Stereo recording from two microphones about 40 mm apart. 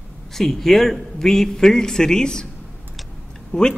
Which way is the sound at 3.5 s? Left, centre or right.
Left.